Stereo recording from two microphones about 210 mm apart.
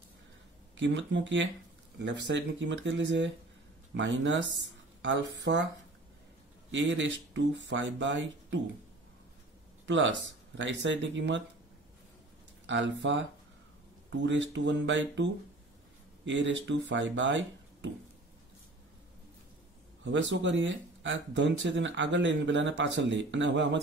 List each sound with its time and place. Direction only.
0.7 s speech: 60° right (ahead or behind)
6.7 s speech: 60° right (ahead or behind)
9.8 s speech: 60° right (ahead or behind)
12.6 s speech: 60° right (ahead or behind)
20.1 s speech: 60° right (ahead or behind)